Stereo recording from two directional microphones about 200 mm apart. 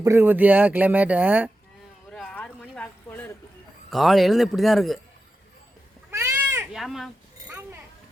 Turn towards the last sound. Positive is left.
turn(degrees=0)  # may be behind; listen again after turning